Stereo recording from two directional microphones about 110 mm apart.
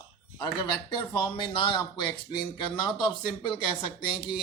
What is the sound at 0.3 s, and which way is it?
Speech, 40° left (ahead or behind).